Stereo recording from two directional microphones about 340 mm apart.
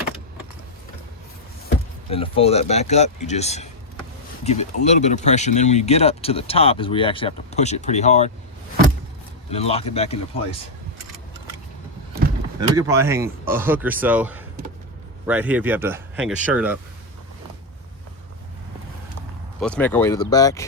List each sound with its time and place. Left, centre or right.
2.0 s speech: centre
9.5 s speech: centre
12.9 s speech: centre
19.5 s speech: centre